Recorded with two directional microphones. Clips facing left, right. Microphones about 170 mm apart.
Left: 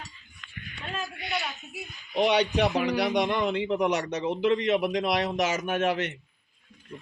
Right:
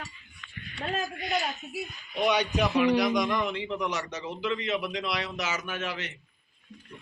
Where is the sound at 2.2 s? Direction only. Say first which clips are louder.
Left 2 dB; 65° left (ahead or behind).